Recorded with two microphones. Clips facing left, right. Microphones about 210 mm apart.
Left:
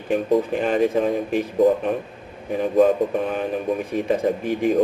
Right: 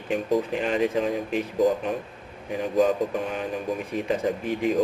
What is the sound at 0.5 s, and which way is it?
Speech, 50° left (ahead or behind).